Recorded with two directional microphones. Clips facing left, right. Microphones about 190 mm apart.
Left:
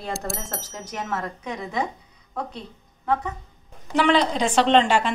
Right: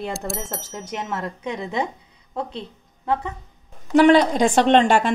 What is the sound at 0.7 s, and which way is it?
Speech, 20° right (ahead or behind).